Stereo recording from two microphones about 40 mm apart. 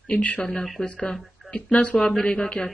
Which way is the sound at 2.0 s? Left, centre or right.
Centre.